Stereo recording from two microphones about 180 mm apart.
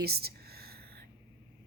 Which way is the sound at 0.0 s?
60° right (ahead or behind).